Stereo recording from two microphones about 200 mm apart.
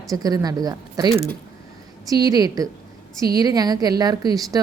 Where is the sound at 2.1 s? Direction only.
20° right (ahead or behind).